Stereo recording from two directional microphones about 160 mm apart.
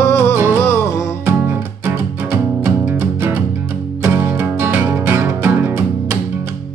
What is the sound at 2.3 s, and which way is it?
Music, 10° right (ahead or behind).